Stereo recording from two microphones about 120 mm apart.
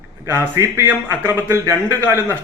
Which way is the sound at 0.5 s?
30° right (ahead or behind).